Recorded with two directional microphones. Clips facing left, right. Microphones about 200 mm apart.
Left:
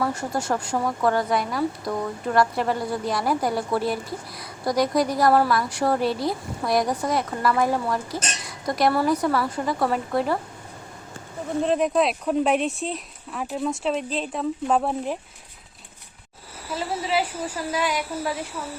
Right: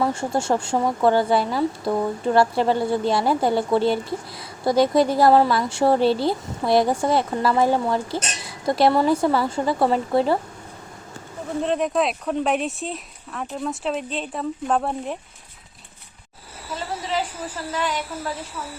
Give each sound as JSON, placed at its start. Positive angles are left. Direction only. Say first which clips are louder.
{"t": 0.0, "sound": "speech", "louder": "right 3 dB", "side_deg": -25}
{"t": 11.6, "sound": "speech", "louder": "left 1 dB", "side_deg": 0}
{"t": 17.7, "sound": "a woman's voice", "louder": "even", "side_deg": 10}